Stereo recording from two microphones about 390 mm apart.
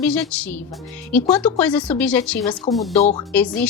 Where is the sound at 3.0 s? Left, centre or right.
Centre.